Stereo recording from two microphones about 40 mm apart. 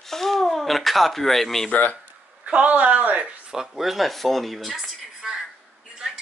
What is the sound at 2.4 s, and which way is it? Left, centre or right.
Speech, right.